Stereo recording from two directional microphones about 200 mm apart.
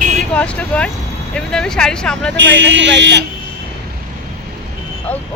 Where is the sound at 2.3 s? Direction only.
65° right (ahead or behind).